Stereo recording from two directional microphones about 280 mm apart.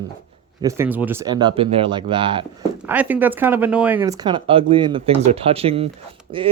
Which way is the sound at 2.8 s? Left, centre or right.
Centre.